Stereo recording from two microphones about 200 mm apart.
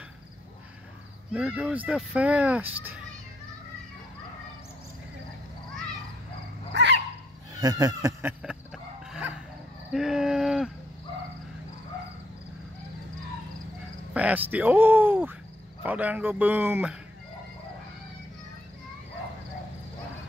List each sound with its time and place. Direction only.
1.3 s speech: 5° right (ahead or behind)
6.7 s dog: 60° right (ahead or behind)
7.6 s a sound: 20° right (ahead or behind)
14.1 s speech: 5° right (ahead or behind)